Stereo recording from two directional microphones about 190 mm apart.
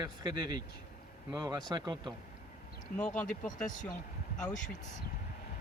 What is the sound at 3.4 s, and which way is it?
Speech, 40° left (ahead or behind).